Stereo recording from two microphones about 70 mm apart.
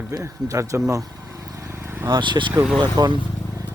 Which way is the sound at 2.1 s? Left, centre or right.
Right.